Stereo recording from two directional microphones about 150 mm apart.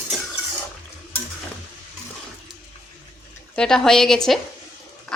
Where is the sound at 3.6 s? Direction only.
5° left (ahead or behind).